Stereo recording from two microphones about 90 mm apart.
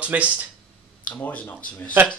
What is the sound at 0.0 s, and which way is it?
Speech, 15° right (ahead or behind).